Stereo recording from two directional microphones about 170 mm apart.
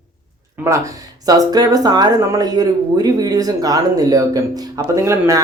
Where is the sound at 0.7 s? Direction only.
20° right (ahead or behind).